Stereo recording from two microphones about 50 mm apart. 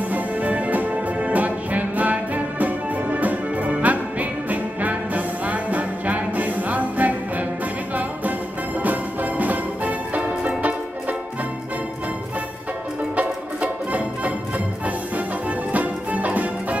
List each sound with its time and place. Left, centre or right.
0.1 s music: right
8.8 s music: right
13.1 s music: right
15.7 s music: right